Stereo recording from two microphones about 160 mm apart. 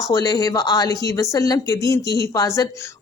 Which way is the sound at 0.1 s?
20° left (ahead or behind).